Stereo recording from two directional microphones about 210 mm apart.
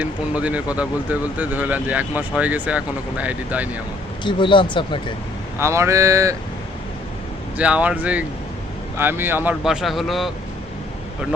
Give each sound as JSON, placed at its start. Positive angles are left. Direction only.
{"t": 0.0, "sound": "speech", "side_deg": -5}
{"t": 4.2, "sound": "speech", "side_deg": 20}
{"t": 5.5, "sound": "speech", "side_deg": -15}
{"t": 7.5, "sound": "speech", "side_deg": -5}